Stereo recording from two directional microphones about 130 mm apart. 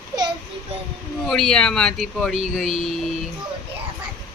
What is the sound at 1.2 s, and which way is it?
Speech, 5° left (ahead or behind).